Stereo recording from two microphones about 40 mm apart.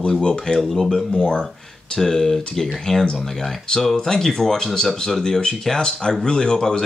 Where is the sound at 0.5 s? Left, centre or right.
Centre.